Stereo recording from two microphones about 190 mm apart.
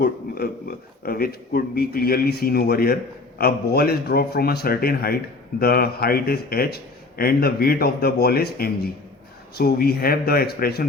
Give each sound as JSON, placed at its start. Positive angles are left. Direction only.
{"t": 0.0, "sound": "speech", "side_deg": 55}